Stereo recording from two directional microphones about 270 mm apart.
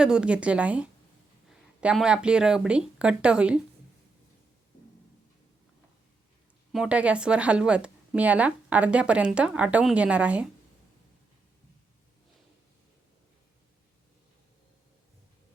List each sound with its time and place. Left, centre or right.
0.0 s speech: centre
6.7 s speech: centre